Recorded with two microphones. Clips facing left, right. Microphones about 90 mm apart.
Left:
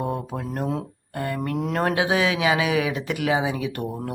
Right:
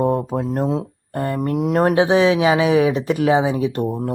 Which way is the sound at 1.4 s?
20° right (ahead or behind).